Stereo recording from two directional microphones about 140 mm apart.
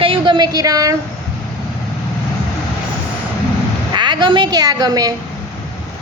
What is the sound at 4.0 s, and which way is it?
A woman's voice, 35° right (ahead or behind).